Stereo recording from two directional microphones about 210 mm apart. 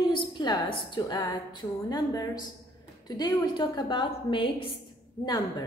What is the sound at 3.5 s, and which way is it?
A woman's voice, 20° left (ahead or behind).